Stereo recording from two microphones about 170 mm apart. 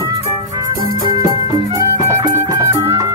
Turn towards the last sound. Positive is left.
turn(degrees=-20)  # may be behind; listen again after turning